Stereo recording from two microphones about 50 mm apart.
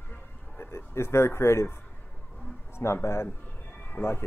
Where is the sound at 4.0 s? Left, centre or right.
Left.